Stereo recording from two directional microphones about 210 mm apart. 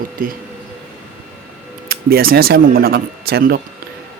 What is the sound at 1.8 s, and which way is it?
Speech, 45° right (ahead or behind).